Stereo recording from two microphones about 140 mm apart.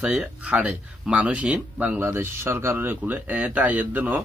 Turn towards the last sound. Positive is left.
turn(degrees=-10)  # may be behind; listen again after turning